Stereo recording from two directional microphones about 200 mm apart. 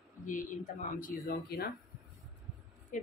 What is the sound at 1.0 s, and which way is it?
Speech, 50° left (ahead or behind).